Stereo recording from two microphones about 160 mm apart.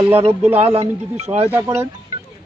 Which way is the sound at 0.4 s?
10° right (ahead or behind).